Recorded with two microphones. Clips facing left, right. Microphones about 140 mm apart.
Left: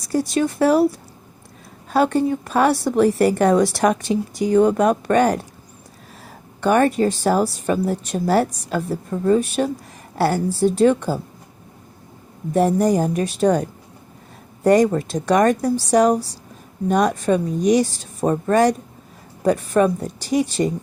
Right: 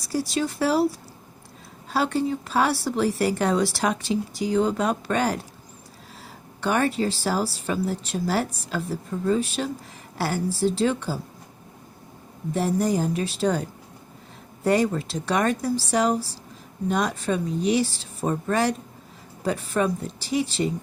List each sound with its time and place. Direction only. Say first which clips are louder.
0.0 s a woman's voice: left 6 dB; 50° left (ahead or behind)
12.5 s a woman's voice: left 6 dB; 50° left (ahead or behind)